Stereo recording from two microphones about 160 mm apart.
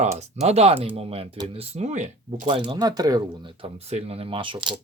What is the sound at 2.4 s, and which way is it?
Speech, 30° right (ahead or behind).